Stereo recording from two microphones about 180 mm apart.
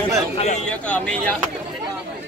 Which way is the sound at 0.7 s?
5° left (ahead or behind).